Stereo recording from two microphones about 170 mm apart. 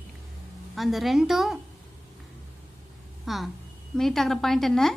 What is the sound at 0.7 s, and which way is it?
Speech, centre (ahead or behind).